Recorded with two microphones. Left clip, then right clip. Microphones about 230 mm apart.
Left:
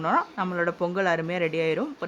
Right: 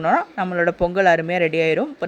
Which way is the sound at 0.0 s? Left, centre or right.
Centre.